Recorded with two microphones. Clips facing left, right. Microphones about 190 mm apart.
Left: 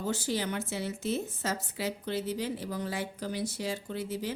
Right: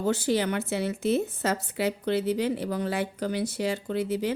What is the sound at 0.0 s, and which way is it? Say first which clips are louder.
A woman's voice: right 7 dB; 65° right (ahead or behind).